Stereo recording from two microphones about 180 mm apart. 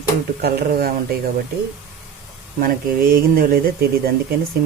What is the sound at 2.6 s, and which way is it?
Speech, 50° right (ahead or behind).